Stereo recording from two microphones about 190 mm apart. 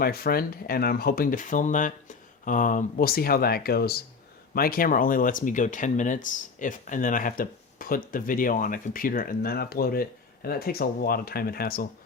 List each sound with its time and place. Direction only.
0.0 s speech: 50° left (ahead or behind)